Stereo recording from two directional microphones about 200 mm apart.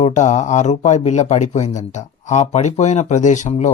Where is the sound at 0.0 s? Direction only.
35° left (ahead or behind).